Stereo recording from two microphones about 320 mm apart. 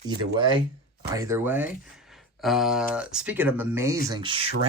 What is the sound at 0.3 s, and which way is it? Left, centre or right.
Speech, centre.